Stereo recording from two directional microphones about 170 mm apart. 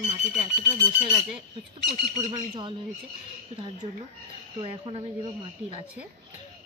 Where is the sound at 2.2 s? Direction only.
30° right (ahead or behind).